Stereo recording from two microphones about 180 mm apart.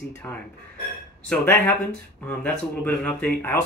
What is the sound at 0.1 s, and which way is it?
Speech, 10° left (ahead or behind).